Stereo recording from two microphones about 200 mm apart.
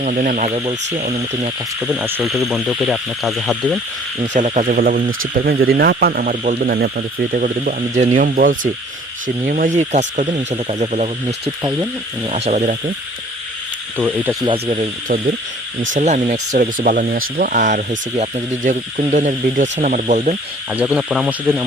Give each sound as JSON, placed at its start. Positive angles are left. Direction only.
{"t": 0.0, "sound": "speech", "side_deg": -40}
{"t": 1.8, "sound": "speech", "side_deg": -5}
{"t": 4.4, "sound": "speech", "side_deg": -35}
{"t": 13.9, "sound": "speech", "side_deg": -10}
{"t": 14.4, "sound": "speech", "side_deg": -30}
{"t": 20.7, "sound": "speech", "side_deg": -5}